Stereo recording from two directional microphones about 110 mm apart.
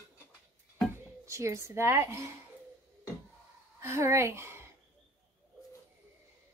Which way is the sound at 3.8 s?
25° right (ahead or behind).